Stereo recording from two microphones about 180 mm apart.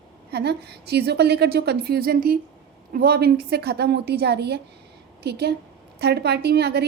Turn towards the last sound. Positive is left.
turn(degrees=-65)  # may be behind; listen again after turning